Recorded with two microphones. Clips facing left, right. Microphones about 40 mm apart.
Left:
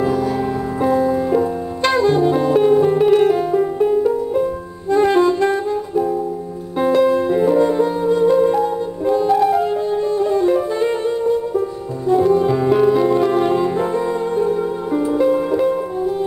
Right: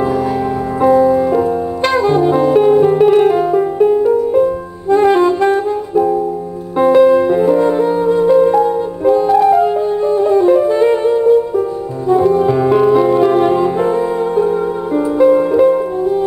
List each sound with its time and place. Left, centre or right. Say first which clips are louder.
0.8 s music: right 7 dB; centre
9.3 s music: right 4 dB; centre
9.6 s music: right 5 dB; centre